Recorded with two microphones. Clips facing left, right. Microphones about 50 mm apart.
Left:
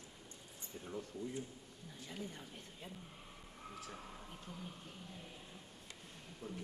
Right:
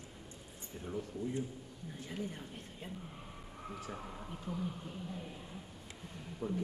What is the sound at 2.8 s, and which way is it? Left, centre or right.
Speech, right.